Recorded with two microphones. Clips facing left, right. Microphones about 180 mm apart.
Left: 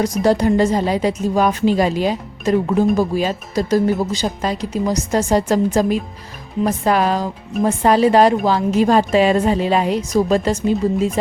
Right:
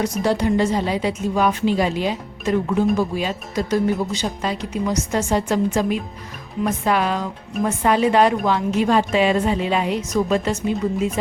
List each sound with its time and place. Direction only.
0.0 s a woman's voice: 40° left (ahead or behind)